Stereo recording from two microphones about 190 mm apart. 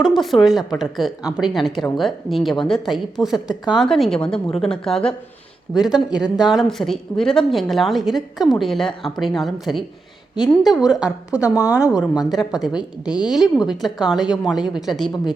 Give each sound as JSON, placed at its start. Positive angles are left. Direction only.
{"t": 0.0, "sound": "a woman's voice", "side_deg": 0}
{"t": 11.3, "sound": "a woman's voice", "side_deg": 15}
{"t": 12.6, "sound": "a woman's voice", "side_deg": -5}